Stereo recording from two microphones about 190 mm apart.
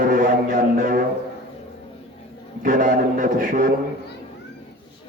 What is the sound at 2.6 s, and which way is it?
A man's voice, 45° right (ahead or behind).